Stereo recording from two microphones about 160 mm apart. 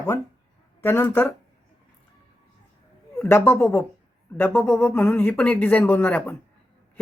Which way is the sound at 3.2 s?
15° left (ahead or behind).